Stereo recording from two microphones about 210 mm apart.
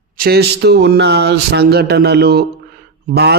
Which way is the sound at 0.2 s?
50° right (ahead or behind).